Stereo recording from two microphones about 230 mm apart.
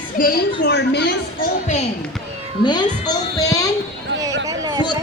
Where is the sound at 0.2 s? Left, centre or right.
Left.